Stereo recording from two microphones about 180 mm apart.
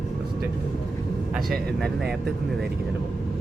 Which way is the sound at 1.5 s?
Centre (ahead or behind).